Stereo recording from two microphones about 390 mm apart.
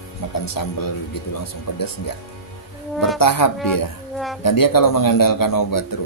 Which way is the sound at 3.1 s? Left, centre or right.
Left.